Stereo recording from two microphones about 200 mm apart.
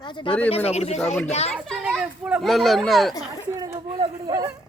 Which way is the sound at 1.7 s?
5° right (ahead or behind).